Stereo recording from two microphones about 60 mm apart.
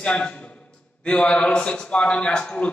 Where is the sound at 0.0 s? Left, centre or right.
Centre.